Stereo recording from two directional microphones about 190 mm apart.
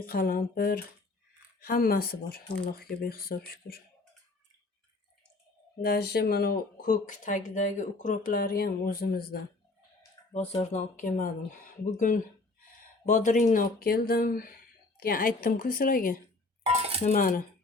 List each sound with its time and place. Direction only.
0.0 s speech: 50° left (ahead or behind)
5.8 s speech: 55° left (ahead or behind)
10.3 s speech: 35° left (ahead or behind)